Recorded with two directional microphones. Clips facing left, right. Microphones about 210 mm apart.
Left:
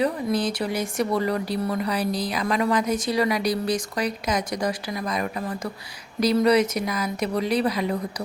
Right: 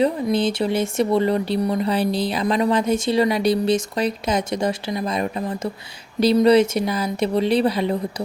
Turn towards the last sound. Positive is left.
turn(degrees=-30)  # may be behind; listen again after turning